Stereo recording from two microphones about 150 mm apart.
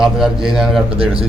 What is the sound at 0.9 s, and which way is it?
Speech, 40° right (ahead or behind).